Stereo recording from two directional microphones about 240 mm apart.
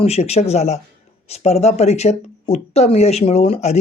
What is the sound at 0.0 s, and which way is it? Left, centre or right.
Speech, left.